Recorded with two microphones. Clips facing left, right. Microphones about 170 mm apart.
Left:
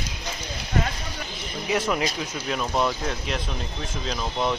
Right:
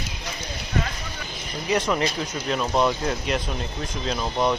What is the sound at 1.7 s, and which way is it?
Speech, 5° left (ahead or behind).